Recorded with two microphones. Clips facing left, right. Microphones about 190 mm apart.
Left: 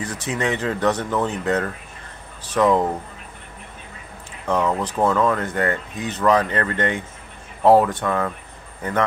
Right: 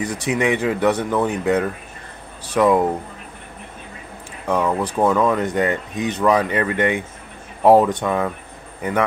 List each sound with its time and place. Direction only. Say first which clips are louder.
0.0 s speech: right 4 dB; 15° right (ahead or behind)
4.5 s speech: right 1 dB; 10° right (ahead or behind)